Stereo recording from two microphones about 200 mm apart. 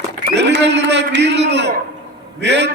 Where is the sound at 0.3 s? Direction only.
60° right (ahead or behind).